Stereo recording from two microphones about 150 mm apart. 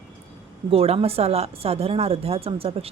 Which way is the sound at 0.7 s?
40° right (ahead or behind).